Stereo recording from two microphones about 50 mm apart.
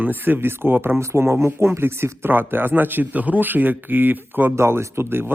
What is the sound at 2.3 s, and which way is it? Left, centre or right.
Speech, right.